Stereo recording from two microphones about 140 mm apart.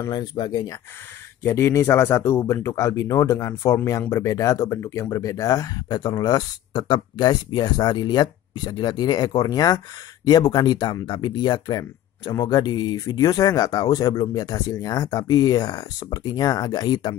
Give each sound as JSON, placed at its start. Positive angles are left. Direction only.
{"t": 0.1, "sound": "speech", "side_deg": 30}
{"t": 1.4, "sound": "speech", "side_deg": 20}